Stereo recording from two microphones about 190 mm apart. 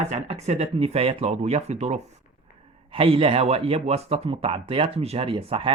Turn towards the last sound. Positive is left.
turn(degrees=-30)  # may be behind; listen again after turning